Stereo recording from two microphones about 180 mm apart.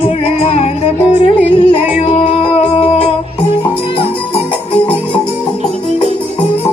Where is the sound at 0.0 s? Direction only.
35° left (ahead or behind).